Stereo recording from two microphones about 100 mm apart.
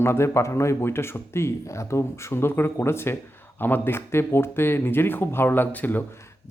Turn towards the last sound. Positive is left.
turn(degrees=15)  # may be behind; listen again after turning